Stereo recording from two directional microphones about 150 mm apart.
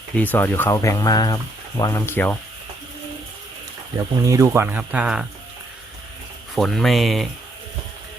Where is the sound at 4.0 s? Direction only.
20° right (ahead or behind).